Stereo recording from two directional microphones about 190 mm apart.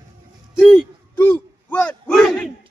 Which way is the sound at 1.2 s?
10° left (ahead or behind).